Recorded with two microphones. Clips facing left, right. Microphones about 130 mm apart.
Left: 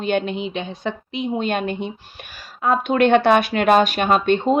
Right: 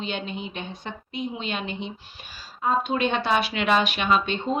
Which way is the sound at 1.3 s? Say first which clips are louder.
Left 9 dB; 50° left (ahead or behind).